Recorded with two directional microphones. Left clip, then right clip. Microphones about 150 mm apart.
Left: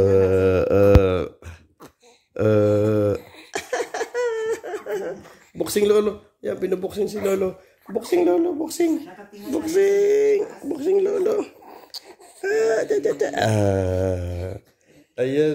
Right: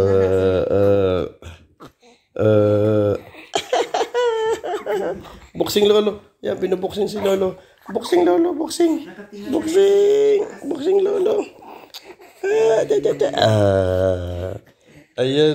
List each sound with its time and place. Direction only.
0.0 s mantra: 35° left (ahead or behind)
1.1 s a sound: 15° left (ahead or behind)
3.6 s laughter: 5° left (ahead or behind); by 8.5 s 20° left (ahead or behind)
8.6 s speech: 20° left (ahead or behind)
10.8 s speech: 90° left
11.1 s a sound: 30° left (ahead or behind)
15.1 s a man's voice: 10° left (ahead or behind)